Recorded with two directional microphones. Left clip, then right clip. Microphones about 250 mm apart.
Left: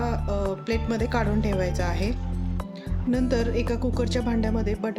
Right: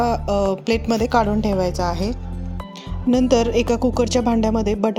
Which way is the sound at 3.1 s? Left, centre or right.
Right.